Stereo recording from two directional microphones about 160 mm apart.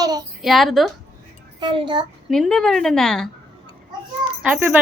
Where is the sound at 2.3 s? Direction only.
Centre (ahead or behind).